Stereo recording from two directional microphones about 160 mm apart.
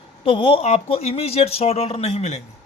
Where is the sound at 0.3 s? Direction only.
35° left (ahead or behind).